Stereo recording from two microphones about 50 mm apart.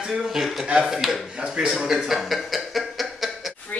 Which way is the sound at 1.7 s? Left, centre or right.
Centre.